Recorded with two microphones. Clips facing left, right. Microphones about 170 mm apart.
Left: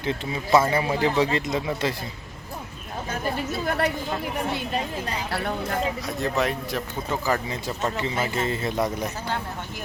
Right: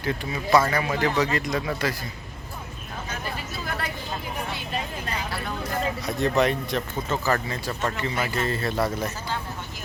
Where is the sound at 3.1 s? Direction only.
50° left (ahead or behind).